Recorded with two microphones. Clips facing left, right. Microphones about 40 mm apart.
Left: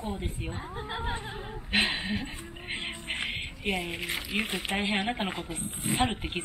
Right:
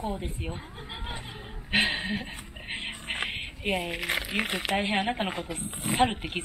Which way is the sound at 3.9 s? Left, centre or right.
Right.